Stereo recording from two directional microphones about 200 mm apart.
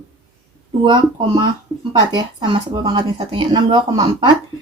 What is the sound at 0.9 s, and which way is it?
Speech, 20° right (ahead or behind).